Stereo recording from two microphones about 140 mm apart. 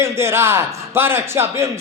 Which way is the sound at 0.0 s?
20° right (ahead or behind).